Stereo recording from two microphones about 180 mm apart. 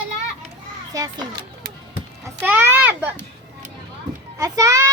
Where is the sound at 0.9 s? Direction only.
20° right (ahead or behind).